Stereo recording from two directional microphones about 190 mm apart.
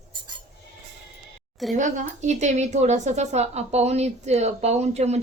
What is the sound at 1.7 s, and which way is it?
A woman's voice, 40° right (ahead or behind).